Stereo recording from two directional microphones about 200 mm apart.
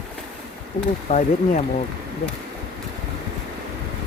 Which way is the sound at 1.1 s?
35° left (ahead or behind).